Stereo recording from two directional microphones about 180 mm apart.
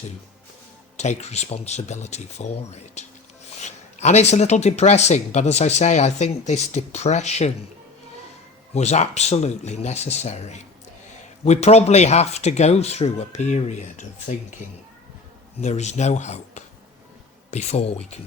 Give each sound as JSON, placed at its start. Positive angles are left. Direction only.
{"t": 0.9, "sound": "speech", "side_deg": 40}
{"t": 8.7, "sound": "speech", "side_deg": 40}
{"t": 15.6, "sound": "speech", "side_deg": 40}